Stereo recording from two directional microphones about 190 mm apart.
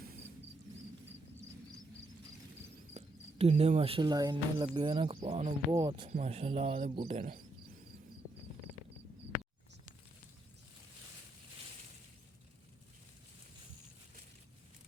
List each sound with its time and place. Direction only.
2.9 s speech: 35° right (ahead or behind)
5.7 s speech: 25° right (ahead or behind)
6.1 s speech: 35° right (ahead or behind)
9.3 s a sound: 10° left (ahead or behind)